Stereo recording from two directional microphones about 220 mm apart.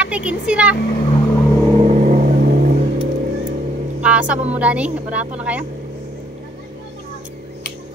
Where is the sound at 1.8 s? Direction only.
30° right (ahead or behind).